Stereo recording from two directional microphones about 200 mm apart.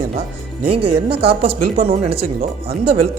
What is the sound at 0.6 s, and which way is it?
Speech, 30° right (ahead or behind).